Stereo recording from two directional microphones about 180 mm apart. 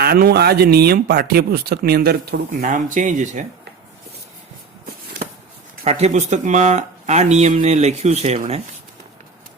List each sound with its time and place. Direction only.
0.0 s speech: 60° right (ahead or behind)
5.8 s speech: 35° right (ahead or behind)